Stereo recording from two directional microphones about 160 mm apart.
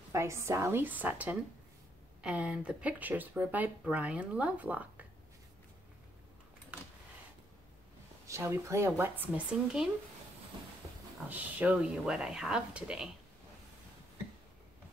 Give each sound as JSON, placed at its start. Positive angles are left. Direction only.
{"t": 0.1, "sound": "speech", "side_deg": -15}
{"t": 6.7, "sound": "a sound", "side_deg": -10}
{"t": 8.3, "sound": "speech", "side_deg": -15}
{"t": 11.2, "sound": "speech", "side_deg": -10}